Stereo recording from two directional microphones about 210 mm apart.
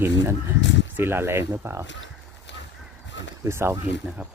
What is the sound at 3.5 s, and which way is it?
Speech, 10° right (ahead or behind).